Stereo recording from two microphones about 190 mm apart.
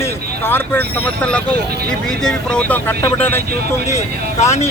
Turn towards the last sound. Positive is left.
turn(degrees=15)  # may be behind; listen again after turning